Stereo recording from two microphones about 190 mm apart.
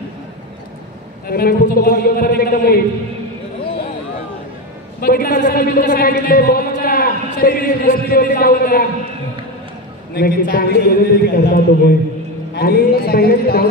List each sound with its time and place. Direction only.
1.2 s speech: 50° left (ahead or behind)
5.0 s speech: 50° left (ahead or behind)
10.1 s speech: 50° left (ahead or behind)